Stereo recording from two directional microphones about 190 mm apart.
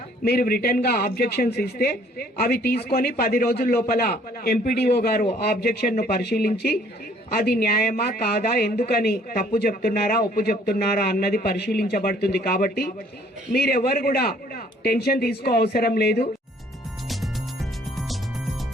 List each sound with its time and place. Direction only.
0.3 s speech: 50° left (ahead or behind)